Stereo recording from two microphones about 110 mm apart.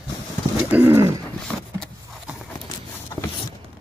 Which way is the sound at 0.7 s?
20° right (ahead or behind).